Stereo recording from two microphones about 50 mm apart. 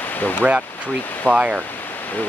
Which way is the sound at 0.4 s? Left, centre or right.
Right.